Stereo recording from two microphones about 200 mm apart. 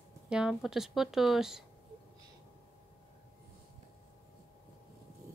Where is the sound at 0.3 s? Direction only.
5° right (ahead or behind).